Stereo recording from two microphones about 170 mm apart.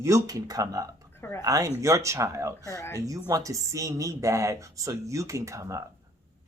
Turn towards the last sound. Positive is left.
turn(degrees=-15)  # may be behind; listen again after turning